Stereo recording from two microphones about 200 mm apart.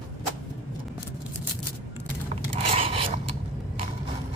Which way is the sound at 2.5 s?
30° right (ahead or behind).